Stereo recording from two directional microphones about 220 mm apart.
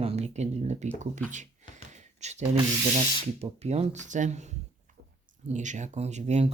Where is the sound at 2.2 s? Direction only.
30° right (ahead or behind).